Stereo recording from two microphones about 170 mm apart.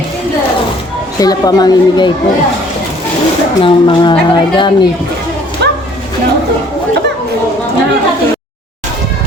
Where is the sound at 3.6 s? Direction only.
25° left (ahead or behind).